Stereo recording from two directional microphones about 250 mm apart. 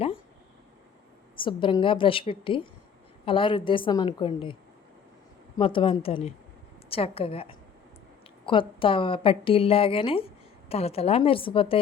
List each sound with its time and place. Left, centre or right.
1.4 s speech: centre
5.5 s speech: left